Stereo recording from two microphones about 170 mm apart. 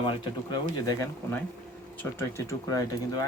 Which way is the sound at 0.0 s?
30° left (ahead or behind).